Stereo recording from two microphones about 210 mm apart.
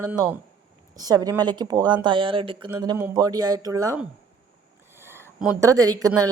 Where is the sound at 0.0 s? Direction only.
10° right (ahead or behind).